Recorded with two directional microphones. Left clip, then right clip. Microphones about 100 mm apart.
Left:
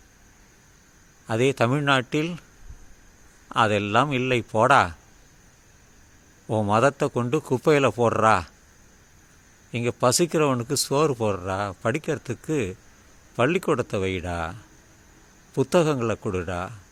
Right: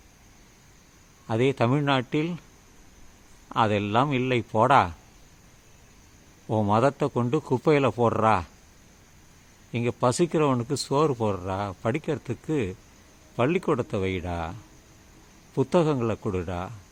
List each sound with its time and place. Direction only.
1.3 s speech: 25° left (ahead or behind)
3.5 s speech: 25° left (ahead or behind)
6.5 s speech: 25° left (ahead or behind)
9.7 s speech: 25° left (ahead or behind)